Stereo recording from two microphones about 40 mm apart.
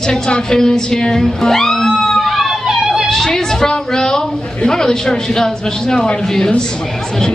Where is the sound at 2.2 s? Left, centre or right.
Centre.